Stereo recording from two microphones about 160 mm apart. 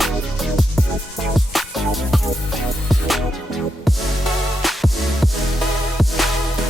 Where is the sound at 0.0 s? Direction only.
Centre (ahead or behind).